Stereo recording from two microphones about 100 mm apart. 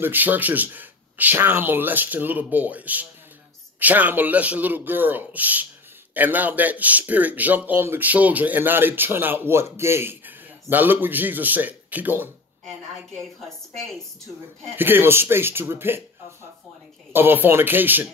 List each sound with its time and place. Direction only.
0.0 s a man's voice: 20° right (ahead or behind)
14.8 s speech: 20° right (ahead or behind)
17.1 s speech: 20° right (ahead or behind)